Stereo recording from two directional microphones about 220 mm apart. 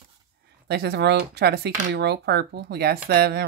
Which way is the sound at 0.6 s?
50° right (ahead or behind).